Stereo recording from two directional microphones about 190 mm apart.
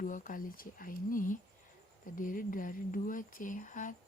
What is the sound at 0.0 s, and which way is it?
Speech, 45° left (ahead or behind).